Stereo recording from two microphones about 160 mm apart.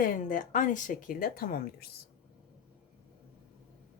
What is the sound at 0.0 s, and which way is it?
Speech, 60° left (ahead or behind).